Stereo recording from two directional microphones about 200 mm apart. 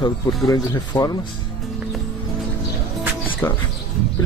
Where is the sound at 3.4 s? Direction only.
15° left (ahead or behind).